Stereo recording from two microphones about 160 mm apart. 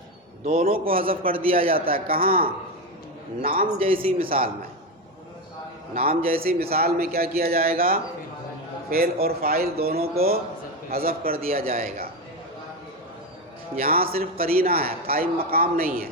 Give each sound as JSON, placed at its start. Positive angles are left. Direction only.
{"t": 0.5, "sound": "a man's voice", "side_deg": -65}
{"t": 3.8, "sound": "speech", "side_deg": -35}
{"t": 5.9, "sound": "a man's voice", "side_deg": -65}
{"t": 9.2, "sound": "a man's voice", "side_deg": -70}
{"t": 13.7, "sound": "a man's voice", "side_deg": -70}